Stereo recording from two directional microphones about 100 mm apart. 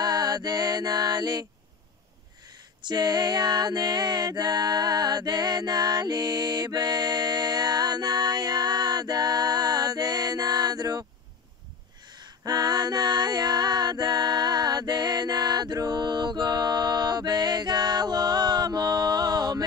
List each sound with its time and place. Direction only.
0.0 s mantra: 45° right (ahead or behind)
2.8 s music: 45° right (ahead or behind)
12.1 s a sound: 45° right (ahead or behind)